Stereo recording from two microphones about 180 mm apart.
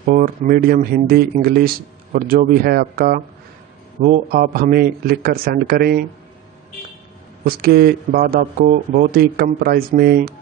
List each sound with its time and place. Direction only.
0.1 s speech: 50° right (ahead or behind)
7.4 s speech: 60° right (ahead or behind)